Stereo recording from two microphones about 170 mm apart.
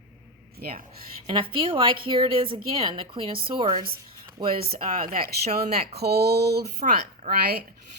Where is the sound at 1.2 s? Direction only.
30° right (ahead or behind).